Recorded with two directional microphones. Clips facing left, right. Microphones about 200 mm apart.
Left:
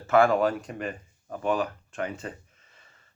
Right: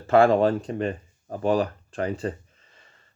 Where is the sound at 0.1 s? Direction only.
30° right (ahead or behind).